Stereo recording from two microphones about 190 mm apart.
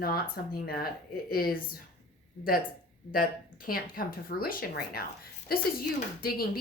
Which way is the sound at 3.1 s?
50° left (ahead or behind).